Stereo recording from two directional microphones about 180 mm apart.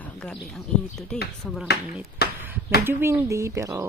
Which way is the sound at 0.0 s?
5° left (ahead or behind).